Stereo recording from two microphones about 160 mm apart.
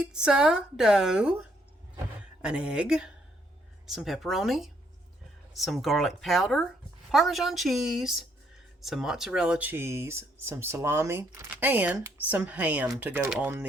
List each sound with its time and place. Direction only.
0.0 s a woman's voice: 5° right (ahead or behind)